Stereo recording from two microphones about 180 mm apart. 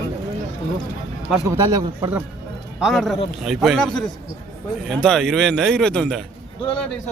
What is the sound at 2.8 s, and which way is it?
A man's voice, centre (ahead or behind).